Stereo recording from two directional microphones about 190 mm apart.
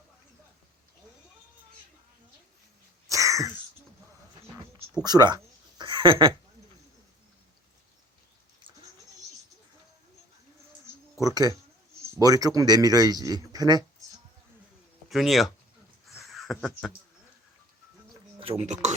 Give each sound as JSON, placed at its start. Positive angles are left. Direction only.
{"t": 3.1, "sound": "throat clearing", "side_deg": -15}
{"t": 5.0, "sound": "a sound", "side_deg": -20}
{"t": 11.2, "sound": "a man's voice", "side_deg": -20}
{"t": 15.1, "sound": "speech", "side_deg": 0}
{"t": 16.0, "sound": "a sound", "side_deg": 0}
{"t": 18.3, "sound": "speech", "side_deg": -30}